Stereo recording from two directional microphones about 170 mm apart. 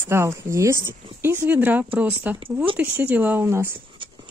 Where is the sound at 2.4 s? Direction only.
30° right (ahead or behind).